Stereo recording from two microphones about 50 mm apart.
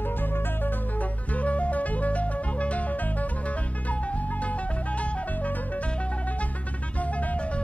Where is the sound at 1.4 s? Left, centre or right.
Left.